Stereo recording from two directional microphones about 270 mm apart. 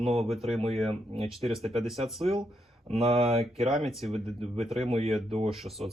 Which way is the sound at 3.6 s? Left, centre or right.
Centre.